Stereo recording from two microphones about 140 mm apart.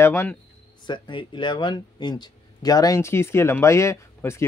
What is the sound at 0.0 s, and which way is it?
Speech, 15° left (ahead or behind).